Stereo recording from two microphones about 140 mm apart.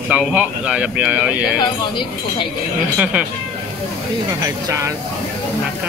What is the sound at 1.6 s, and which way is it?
Speech, 35° left (ahead or behind).